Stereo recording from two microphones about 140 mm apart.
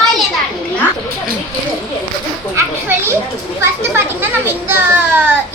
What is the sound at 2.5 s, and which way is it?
Children playing, 15° right (ahead or behind).